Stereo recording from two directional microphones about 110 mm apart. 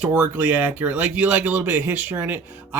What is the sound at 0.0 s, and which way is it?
Speech, 15° right (ahead or behind).